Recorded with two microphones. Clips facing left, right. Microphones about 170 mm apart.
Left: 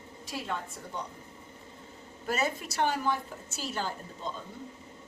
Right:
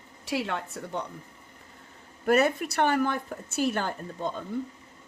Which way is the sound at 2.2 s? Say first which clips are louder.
Right 9 dB; 60° right (ahead or behind).